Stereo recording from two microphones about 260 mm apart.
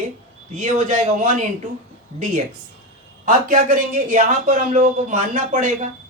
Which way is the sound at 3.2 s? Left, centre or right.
Right.